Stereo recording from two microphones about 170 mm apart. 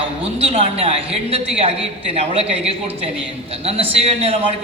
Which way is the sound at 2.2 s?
35° right (ahead or behind).